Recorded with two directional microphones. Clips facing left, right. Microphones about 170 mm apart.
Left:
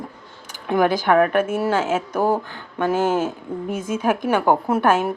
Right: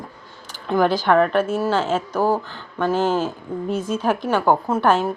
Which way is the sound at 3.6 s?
50° left (ahead or behind).